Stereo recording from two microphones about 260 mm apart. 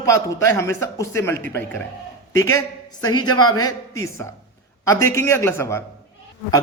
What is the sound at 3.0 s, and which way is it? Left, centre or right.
Speech, centre.